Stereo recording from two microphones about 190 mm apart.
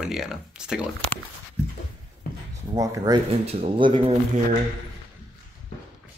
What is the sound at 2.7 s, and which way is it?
Speech, 20° right (ahead or behind).